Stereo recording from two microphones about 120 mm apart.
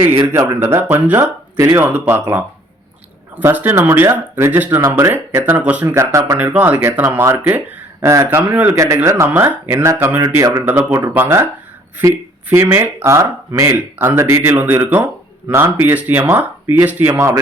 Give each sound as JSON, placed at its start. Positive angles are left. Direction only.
{"t": 0.5, "sound": "speech", "side_deg": -20}
{"t": 5.1, "sound": "speech", "side_deg": -15}
{"t": 5.9, "sound": "speech", "side_deg": -25}
{"t": 8.7, "sound": "speech", "side_deg": -25}
{"t": 10.3, "sound": "speech", "side_deg": -30}
{"t": 10.7, "sound": "speech", "side_deg": -15}
{"t": 12.5, "sound": "speech", "side_deg": -20}